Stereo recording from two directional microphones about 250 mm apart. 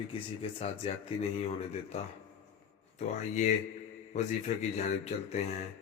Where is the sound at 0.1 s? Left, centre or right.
Left.